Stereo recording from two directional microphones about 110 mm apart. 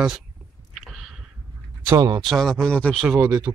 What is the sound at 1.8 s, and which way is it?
Speech, 25° right (ahead or behind).